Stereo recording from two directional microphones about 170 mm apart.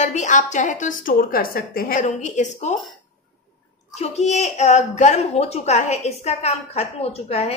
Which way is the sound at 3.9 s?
40° left (ahead or behind).